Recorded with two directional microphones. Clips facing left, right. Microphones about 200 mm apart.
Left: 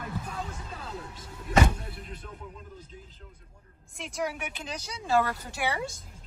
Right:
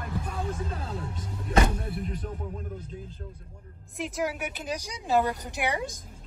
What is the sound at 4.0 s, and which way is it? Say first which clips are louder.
Speech: right 3 dB; 5° right (ahead or behind).